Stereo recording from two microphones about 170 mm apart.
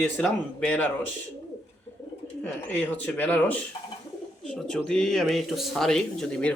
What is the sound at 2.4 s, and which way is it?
Speech, 10° left (ahead or behind).